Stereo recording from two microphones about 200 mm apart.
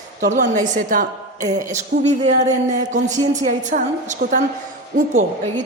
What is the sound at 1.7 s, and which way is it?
Speech, 35° right (ahead or behind).